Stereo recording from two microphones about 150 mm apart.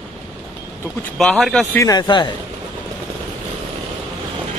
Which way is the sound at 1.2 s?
5° left (ahead or behind).